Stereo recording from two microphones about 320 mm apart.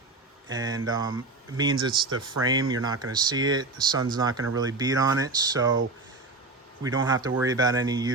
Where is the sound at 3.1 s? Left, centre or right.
Centre.